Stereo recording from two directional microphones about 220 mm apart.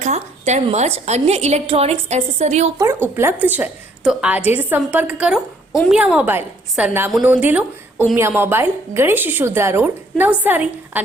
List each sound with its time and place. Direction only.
0.0 s a woman's voice: 30° right (ahead or behind)
2.7 s a woman's voice: 10° right (ahead or behind)